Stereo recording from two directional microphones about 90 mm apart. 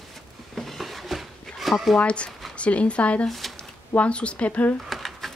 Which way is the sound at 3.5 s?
15° left (ahead or behind).